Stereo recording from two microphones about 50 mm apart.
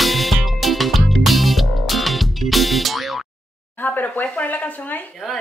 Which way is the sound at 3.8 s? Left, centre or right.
Left.